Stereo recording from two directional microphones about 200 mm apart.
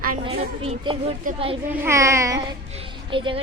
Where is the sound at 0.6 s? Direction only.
30° right (ahead or behind).